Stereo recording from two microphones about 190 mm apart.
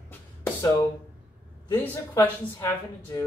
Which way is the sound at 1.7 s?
10° left (ahead or behind).